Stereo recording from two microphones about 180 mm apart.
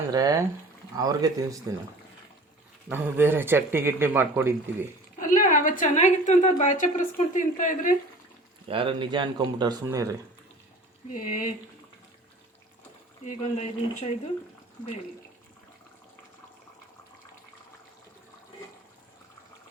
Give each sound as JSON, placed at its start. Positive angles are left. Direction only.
{"t": 0.1, "sound": "speech", "side_deg": -20}
{"t": 2.9, "sound": "speech", "side_deg": -10}
{"t": 5.2, "sound": "a woman's voice", "side_deg": 45}
{"t": 8.6, "sound": "speech", "side_deg": -30}
{"t": 11.1, "sound": "a woman's voice", "side_deg": 50}
{"t": 13.2, "sound": "speech", "side_deg": 40}